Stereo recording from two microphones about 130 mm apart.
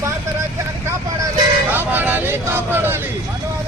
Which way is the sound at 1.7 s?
15° right (ahead or behind).